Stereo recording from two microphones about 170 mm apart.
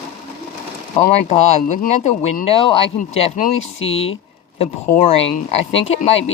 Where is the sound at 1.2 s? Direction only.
40° left (ahead or behind).